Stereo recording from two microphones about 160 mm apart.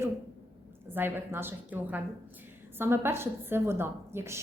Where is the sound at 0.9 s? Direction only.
15° right (ahead or behind).